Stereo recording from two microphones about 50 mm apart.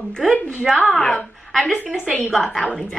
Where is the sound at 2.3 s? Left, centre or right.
Centre.